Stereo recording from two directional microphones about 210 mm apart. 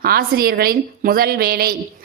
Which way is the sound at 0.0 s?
45° right (ahead or behind).